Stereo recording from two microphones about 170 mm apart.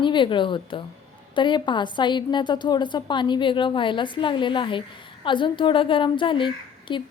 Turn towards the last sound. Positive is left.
turn(degrees=30)  # may be behind; listen again after turning